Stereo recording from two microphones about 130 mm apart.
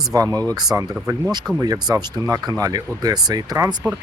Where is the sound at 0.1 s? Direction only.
25° right (ahead or behind).